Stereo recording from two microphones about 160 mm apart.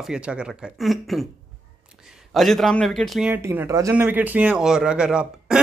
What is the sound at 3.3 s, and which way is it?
Speech, 15° right (ahead or behind).